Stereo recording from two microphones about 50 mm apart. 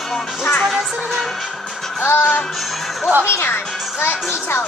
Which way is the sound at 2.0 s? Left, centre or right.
Left.